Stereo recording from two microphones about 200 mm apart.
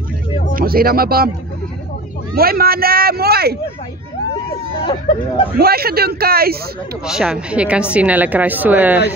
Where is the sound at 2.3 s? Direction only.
50° right (ahead or behind).